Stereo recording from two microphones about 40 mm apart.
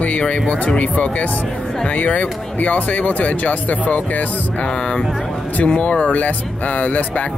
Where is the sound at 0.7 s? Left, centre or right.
Left.